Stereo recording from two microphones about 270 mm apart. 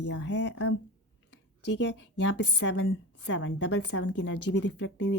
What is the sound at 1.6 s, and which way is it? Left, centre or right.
A woman's voice, left.